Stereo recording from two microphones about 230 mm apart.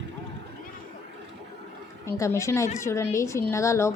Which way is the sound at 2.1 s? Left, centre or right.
Centre.